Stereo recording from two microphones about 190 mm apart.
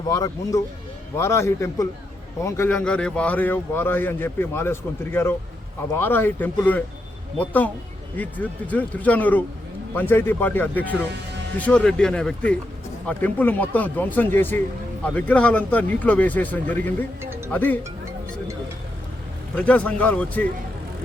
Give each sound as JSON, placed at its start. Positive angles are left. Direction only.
{"t": 0.1, "sound": "speech", "side_deg": 20}
{"t": 19.5, "sound": "speech", "side_deg": 5}